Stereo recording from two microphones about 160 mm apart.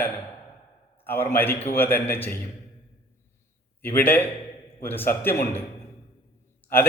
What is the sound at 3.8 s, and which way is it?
A man's voice, 10° left (ahead or behind).